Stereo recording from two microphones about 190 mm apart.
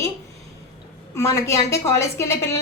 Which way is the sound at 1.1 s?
15° left (ahead or behind).